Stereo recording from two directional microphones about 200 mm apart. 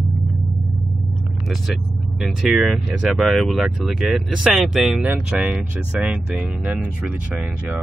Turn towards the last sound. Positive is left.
turn(degrees=-5)  # may be behind; listen again after turning